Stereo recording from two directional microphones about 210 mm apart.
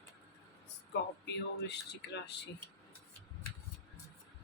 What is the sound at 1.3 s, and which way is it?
Speech, 55° left (ahead or behind).